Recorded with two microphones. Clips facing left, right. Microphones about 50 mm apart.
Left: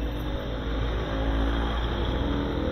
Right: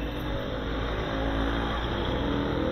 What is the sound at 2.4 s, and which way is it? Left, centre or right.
Vehicle, right.